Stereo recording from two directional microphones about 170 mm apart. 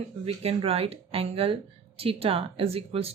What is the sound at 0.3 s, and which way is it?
Speech, 35° right (ahead or behind).